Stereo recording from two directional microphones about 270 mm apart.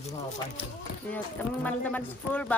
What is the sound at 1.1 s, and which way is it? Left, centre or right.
Speech, centre.